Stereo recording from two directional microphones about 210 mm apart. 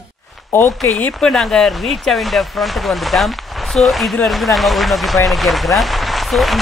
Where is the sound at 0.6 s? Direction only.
Centre (ahead or behind).